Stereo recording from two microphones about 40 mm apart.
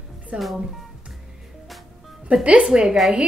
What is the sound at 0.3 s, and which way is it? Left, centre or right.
Speech, right.